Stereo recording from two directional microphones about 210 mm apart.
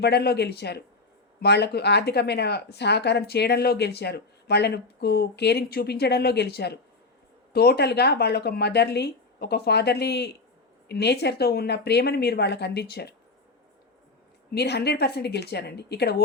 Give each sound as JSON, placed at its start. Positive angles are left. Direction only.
{"t": 0.0, "sound": "speech", "side_deg": 50}
{"t": 14.5, "sound": "speech", "side_deg": 50}